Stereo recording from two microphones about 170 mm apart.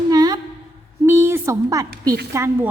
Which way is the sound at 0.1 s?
20° right (ahead or behind).